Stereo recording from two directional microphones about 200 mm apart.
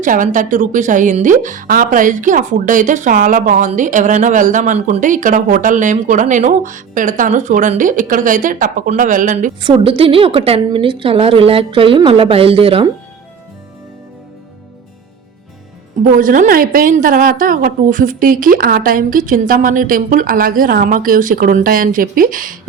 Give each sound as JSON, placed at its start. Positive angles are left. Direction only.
{"t": 0.0, "sound": "a woman's voice", "side_deg": -40}
{"t": 9.7, "sound": "a woman's voice", "side_deg": -25}
{"t": 16.0, "sound": "a woman's voice", "side_deg": -40}